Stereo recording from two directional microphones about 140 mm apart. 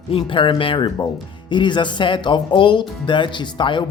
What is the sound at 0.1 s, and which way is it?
Speech, 35° left (ahead or behind).